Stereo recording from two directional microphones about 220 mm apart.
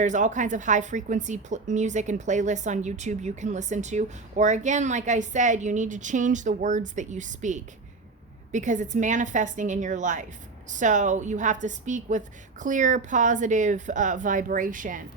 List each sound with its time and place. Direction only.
0.0 s a woman's voice: 35° right (ahead or behind)